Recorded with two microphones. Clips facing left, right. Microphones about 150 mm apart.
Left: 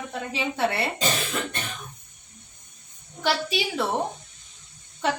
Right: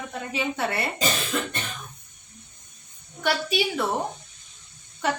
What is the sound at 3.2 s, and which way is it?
Speech, 25° left (ahead or behind).